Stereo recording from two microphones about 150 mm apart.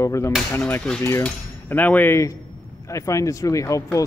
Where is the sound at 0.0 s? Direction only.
20° left (ahead or behind).